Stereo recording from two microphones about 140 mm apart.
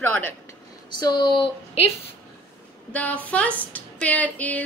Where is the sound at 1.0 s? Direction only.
35° left (ahead or behind).